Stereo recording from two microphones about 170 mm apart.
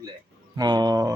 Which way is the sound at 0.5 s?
25° right (ahead or behind).